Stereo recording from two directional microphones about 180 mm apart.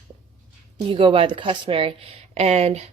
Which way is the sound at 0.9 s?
30° right (ahead or behind).